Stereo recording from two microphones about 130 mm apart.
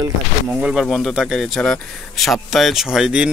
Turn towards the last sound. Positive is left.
turn(degrees=-5)  # may be behind; listen again after turning